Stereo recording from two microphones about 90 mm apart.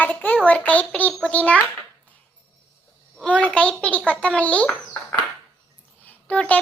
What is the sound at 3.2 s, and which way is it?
A child's voice, 15° left (ahead or behind).